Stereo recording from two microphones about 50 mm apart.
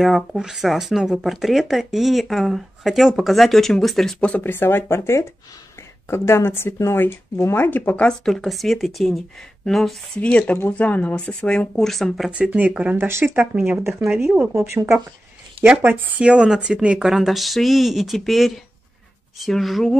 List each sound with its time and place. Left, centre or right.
0.0 s speech: centre
4.4 s speech: left
7.5 s speech: left
8.3 s speech: centre
10.1 s speech: left
11.8 s speech: centre
12.3 s speech: right
12.9 s speech: right
14.0 s speech: centre
14.5 s speech: right
15.8 s speech: right
16.2 s speech: centre
17.0 s speech: centre